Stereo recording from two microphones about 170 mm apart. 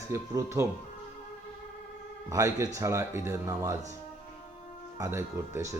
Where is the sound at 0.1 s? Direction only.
15° right (ahead or behind).